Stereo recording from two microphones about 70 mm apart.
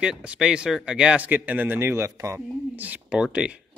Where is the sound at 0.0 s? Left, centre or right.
Centre; by 2.4 s right.